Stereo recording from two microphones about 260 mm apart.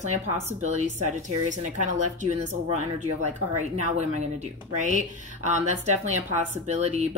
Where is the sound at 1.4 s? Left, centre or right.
Right.